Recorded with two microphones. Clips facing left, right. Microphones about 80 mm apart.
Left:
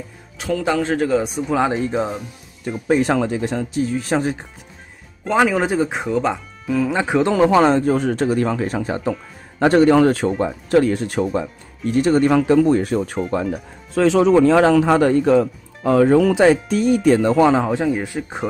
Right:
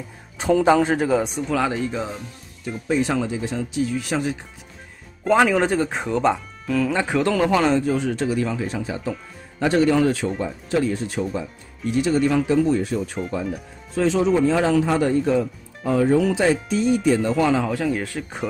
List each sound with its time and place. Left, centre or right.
0.4 s speech: centre
1.7 s speech: left
2.9 s speech: left
5.2 s speech: centre
6.8 s speech: centre; by 17.4 s left
17.4 s speech: left; by 18.4 s centre